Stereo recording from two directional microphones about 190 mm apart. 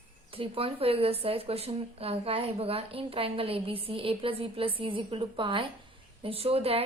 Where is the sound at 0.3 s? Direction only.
30° right (ahead or behind).